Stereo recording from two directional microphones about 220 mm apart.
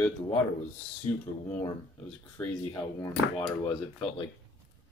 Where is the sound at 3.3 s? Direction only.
25° left (ahead or behind).